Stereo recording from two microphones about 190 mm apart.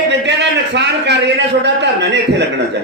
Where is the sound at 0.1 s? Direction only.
65° right (ahead or behind).